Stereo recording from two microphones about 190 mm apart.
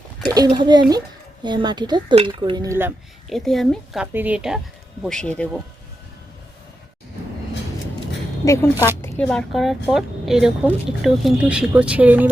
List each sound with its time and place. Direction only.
0.3 s speech: 20° right (ahead or behind)
3.2 s a woman's voice: centre (ahead or behind)
8.4 s a woman's voice: 15° left (ahead or behind); by 12.3 s 10° right (ahead or behind)